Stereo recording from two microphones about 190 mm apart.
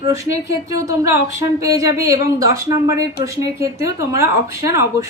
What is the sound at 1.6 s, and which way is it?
Speech, 15° right (ahead or behind).